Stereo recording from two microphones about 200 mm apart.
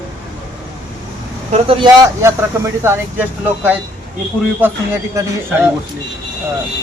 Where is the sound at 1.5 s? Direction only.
25° right (ahead or behind).